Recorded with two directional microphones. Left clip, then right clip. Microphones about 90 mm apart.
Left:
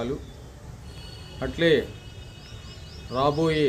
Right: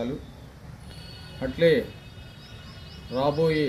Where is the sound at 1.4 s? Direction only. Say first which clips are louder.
Even; 25° left (ahead or behind).